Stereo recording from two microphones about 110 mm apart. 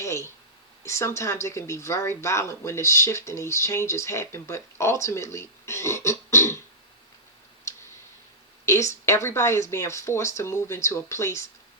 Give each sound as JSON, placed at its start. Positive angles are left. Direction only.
{"t": 0.0, "sound": "a sound", "side_deg": 25}
{"t": 0.8, "sound": "speech", "side_deg": 25}
{"t": 8.6, "sound": "speech", "side_deg": 30}